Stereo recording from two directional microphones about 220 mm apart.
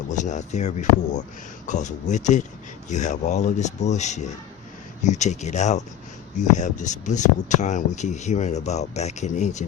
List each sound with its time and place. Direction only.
0.1 s speech: 35° left (ahead or behind)